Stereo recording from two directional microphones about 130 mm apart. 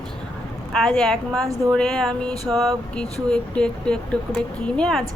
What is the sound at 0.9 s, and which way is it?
Speech, 5° left (ahead or behind).